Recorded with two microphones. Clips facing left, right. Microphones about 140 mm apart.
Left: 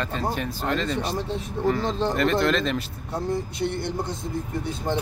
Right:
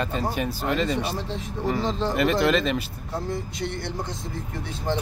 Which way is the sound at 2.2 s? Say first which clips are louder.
Right 2 dB; 10° right (ahead or behind).